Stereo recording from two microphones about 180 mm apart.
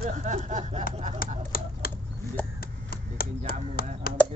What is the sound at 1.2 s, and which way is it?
Speech, 55° left (ahead or behind).